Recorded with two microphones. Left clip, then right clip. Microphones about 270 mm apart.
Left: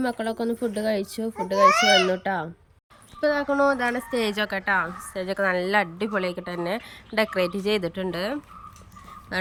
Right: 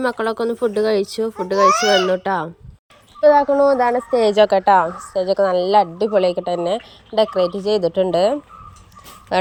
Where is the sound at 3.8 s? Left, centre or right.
Centre.